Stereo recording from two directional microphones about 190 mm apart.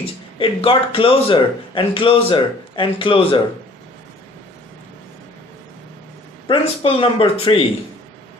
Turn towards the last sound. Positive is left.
turn(degrees=30)  # may be behind; listen again after turning